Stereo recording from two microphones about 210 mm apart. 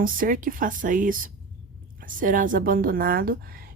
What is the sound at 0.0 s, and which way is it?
A woman's voice, 40° right (ahead or behind).